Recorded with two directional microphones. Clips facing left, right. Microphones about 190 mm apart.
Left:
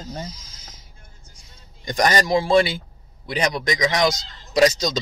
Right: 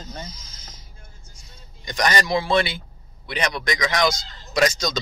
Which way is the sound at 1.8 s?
45° left (ahead or behind).